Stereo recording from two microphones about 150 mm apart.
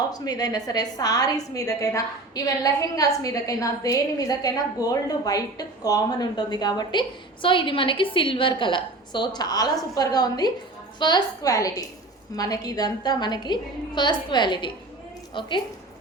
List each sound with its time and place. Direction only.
0.1 s a woman's voice: 25° left (ahead or behind)